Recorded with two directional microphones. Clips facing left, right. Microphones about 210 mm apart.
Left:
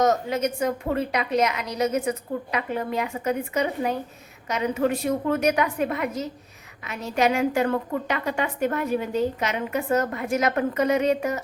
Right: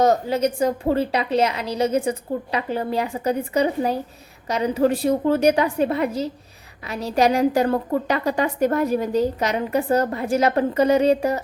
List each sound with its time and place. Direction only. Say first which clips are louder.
0.0 s a woman's voice: right 3 dB; 30° right (ahead or behind)